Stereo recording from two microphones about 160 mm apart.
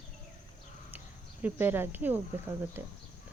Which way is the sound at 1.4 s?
15° right (ahead or behind).